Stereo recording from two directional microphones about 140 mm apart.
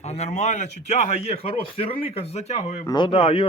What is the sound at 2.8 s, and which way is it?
Speech, 30° left (ahead or behind).